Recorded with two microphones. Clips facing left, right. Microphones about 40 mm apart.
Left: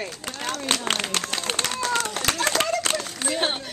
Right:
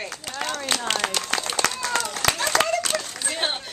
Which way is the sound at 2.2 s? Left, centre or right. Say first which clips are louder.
Right 6 dB; right.